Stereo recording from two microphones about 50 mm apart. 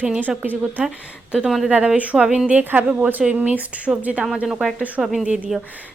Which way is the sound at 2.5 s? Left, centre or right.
Right.